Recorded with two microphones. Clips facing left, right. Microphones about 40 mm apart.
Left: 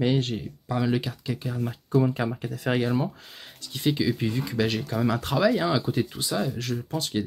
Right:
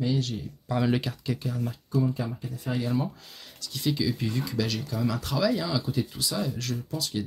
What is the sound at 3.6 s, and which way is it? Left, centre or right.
Speech, left.